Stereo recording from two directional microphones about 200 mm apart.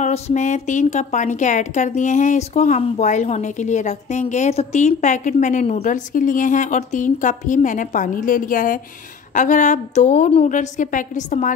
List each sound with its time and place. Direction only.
0.0 s a woman's voice: 35° left (ahead or behind)